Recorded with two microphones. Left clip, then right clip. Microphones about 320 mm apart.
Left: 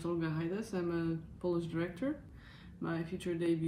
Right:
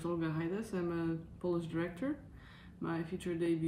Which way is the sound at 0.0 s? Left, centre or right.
Centre.